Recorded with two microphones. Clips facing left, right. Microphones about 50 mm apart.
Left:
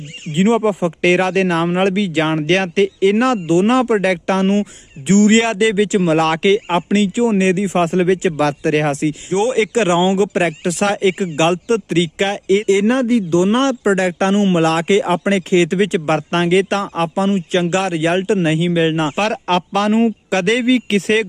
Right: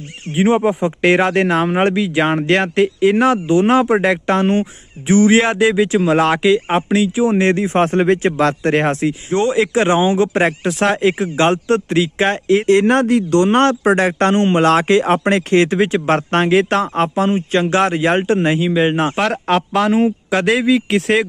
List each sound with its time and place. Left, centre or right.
0.3 s speech: centre
7.3 s speech: right
9.6 s speech: centre; by 12.9 s right
12.9 s speech: right
15.7 s speech: right
18.6 s speech: centre
19.0 s a man's voice: centre